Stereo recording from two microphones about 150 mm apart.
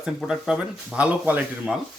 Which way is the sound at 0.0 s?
5° right (ahead or behind).